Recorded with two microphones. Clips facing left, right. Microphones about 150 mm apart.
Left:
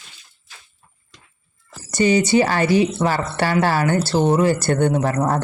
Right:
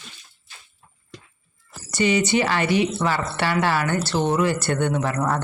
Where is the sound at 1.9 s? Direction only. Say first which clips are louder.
Left 4 dB; 40° left (ahead or behind).